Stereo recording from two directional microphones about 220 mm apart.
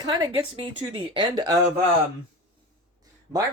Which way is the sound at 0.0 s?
20° right (ahead or behind).